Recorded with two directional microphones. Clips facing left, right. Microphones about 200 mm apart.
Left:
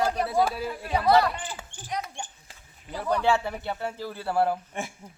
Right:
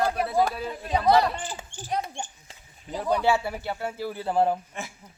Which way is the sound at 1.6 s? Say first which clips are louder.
Right 3 dB; 30° right (ahead or behind).